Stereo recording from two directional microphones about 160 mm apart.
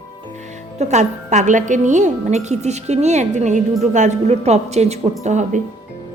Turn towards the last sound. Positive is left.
turn(degrees=-45)  # may be behind; listen again after turning